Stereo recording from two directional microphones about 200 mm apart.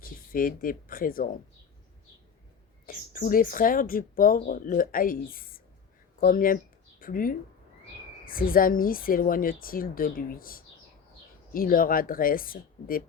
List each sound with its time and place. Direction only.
0.0 s speech: 45° left (ahead or behind)
2.8 s speech: 45° left (ahead or behind)